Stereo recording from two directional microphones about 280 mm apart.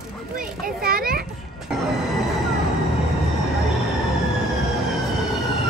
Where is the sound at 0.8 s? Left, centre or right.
Right.